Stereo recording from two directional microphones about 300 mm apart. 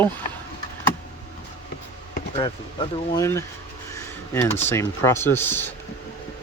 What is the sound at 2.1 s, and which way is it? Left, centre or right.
Speech, centre.